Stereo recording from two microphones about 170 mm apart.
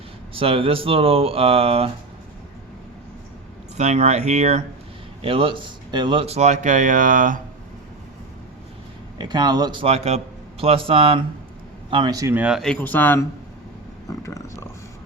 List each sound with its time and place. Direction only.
0.3 s speech: 35° right (ahead or behind)
3.8 s speech: 40° right (ahead or behind)
9.1 s a man's voice: 25° right (ahead or behind); by 13.2 s 10° left (ahead or behind)
14.1 s a sound: 20° left (ahead or behind)